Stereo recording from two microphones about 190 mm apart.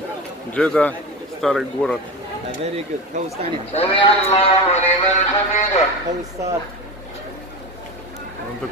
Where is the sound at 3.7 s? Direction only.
30° left (ahead or behind).